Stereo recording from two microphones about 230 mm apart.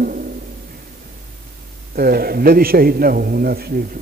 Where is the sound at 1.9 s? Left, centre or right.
Right.